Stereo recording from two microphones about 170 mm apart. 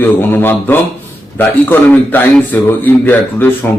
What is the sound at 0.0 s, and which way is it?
A man's voice, 10° left (ahead or behind).